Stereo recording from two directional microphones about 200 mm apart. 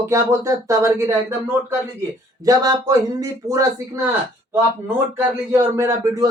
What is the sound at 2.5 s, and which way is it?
A man's voice, 20° right (ahead or behind).